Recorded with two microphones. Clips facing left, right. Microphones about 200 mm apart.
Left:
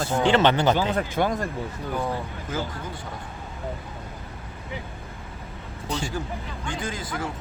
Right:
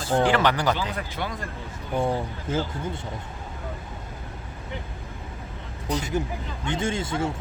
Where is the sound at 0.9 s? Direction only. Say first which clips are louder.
Left 8 dB; 50° left (ahead or behind).